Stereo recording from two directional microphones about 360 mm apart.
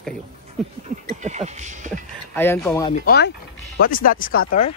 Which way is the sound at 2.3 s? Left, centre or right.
Centre.